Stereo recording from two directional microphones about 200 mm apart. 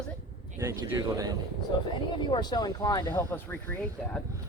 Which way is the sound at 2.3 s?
20° left (ahead or behind).